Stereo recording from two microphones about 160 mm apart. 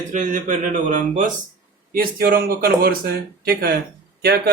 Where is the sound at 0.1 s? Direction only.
50° right (ahead or behind).